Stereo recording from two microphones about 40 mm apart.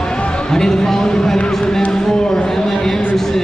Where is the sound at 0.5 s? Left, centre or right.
Centre.